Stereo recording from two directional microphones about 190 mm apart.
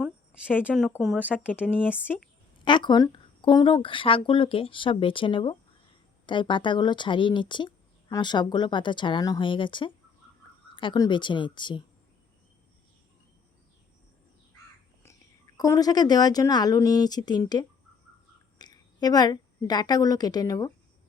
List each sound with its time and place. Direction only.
0.0 s a sound: 5° right (ahead or behind)
0.7 s speech: 5° left (ahead or behind)
0.9 s speech: 5° right (ahead or behind)
2.6 s speech: 25° left (ahead or behind)
15.5 s a woman's voice: 20° left (ahead or behind)